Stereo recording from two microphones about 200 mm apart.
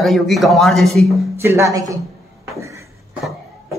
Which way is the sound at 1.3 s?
15° right (ahead or behind).